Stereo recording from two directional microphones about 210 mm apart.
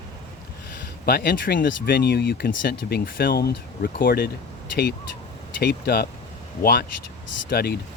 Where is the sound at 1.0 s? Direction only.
45° left (ahead or behind).